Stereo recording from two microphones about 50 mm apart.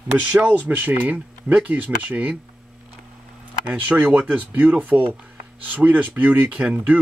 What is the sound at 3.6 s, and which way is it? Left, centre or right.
Speech, right.